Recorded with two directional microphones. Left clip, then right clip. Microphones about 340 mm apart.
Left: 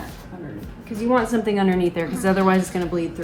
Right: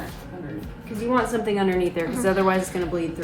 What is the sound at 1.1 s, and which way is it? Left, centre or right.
A woman's voice, centre.